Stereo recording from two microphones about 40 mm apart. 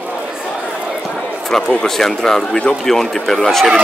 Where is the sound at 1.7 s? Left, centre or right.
Centre.